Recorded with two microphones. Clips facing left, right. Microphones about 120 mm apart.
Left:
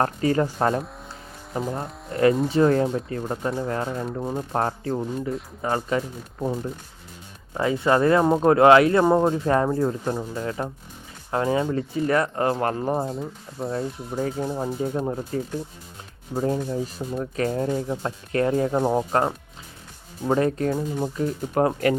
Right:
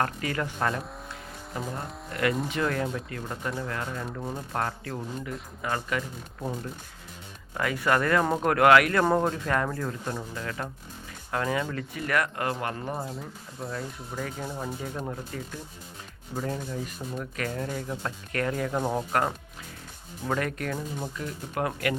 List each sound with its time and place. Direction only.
0.0 s speech: 30° left (ahead or behind)
2.0 s speech: 30° left (ahead or behind)
7.5 s speech: 25° left (ahead or behind)